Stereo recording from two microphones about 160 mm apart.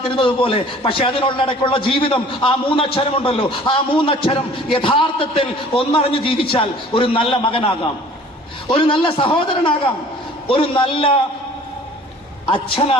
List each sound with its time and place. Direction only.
0.1 s a man's voice: 35° left (ahead or behind)
12.5 s a man's voice: 35° left (ahead or behind)